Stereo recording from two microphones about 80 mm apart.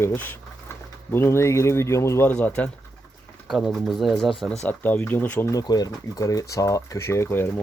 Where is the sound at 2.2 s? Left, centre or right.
Centre.